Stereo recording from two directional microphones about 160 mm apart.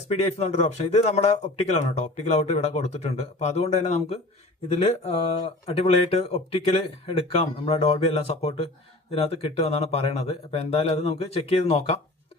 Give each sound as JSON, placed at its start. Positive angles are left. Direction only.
{"t": 0.1, "sound": "a man's voice", "side_deg": 45}